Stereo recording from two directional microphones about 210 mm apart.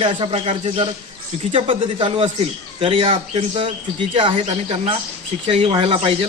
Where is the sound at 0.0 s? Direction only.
25° right (ahead or behind).